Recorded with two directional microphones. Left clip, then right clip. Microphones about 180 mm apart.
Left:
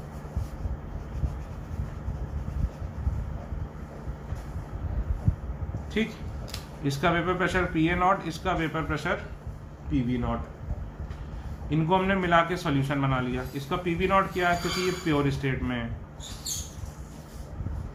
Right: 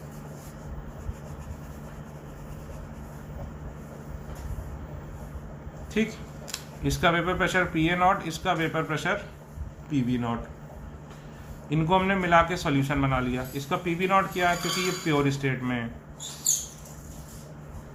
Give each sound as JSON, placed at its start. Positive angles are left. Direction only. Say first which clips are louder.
{"t": 6.0, "sound": "a man's voice", "louder": "right 1 dB", "side_deg": -15}
{"t": 11.7, "sound": "a man's voice", "louder": "right 1 dB", "side_deg": -20}